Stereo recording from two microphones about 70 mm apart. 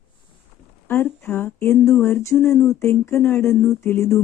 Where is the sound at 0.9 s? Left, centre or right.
Left.